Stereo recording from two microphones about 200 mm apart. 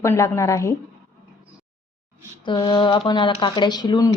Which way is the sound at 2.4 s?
20° left (ahead or behind).